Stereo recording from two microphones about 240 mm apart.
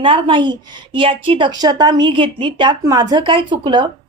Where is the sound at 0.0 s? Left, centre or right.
Right.